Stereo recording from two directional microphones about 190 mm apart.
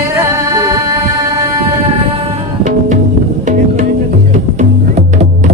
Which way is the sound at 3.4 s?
40° right (ahead or behind).